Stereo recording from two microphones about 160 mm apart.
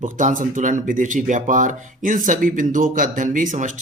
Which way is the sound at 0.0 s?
55° right (ahead or behind).